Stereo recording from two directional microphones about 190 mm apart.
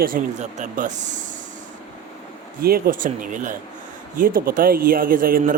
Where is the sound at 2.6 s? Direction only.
55° right (ahead or behind).